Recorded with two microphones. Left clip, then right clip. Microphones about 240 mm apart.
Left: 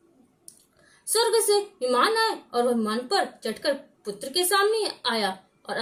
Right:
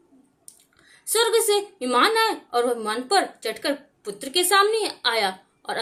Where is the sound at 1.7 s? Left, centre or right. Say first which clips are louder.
Right 5 dB; right.